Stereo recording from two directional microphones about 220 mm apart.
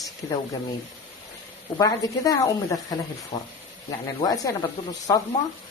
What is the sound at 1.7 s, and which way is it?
Speech, 15° left (ahead or behind).